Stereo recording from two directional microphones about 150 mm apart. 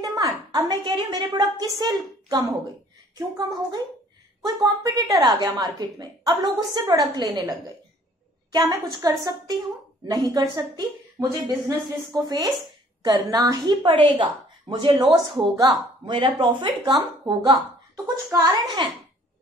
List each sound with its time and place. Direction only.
0.0 s a woman's voice: 25° right (ahead or behind)
4.6 s a woman's voice: 25° right (ahead or behind)